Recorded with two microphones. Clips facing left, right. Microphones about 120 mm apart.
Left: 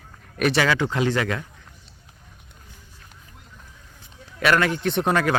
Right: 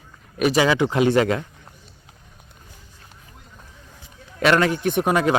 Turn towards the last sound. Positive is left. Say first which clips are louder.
# right 2 dB
turn(degrees=-10)  # may be behind; listen again after turning